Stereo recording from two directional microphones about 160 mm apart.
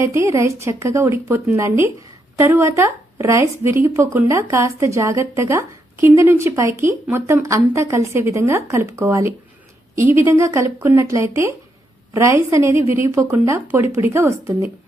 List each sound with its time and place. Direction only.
0.0 s a woman's voice: 20° right (ahead or behind)